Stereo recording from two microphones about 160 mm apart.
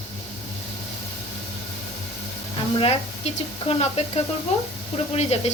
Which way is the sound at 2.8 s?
35° left (ahead or behind).